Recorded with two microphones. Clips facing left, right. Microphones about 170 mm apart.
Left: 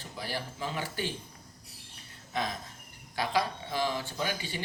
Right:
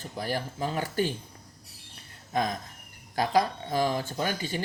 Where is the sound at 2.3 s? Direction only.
45° right (ahead or behind).